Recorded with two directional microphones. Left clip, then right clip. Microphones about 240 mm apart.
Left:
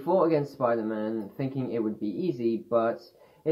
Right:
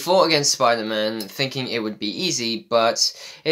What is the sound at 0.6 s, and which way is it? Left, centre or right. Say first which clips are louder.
Speech: right 8 dB; right.